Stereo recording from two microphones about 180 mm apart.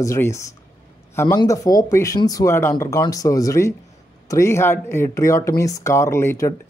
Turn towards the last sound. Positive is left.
turn(degrees=15)  # may be behind; listen again after turning